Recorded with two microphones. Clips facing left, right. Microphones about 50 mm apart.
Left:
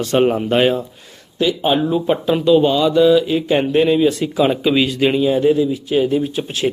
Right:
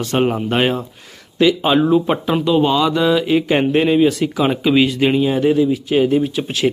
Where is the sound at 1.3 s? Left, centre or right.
Right.